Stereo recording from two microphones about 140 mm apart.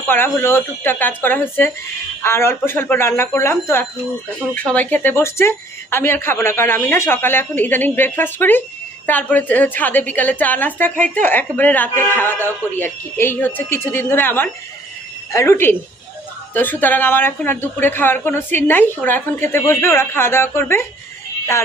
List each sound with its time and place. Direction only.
0.1 s a woman's voice: 15° left (ahead or behind)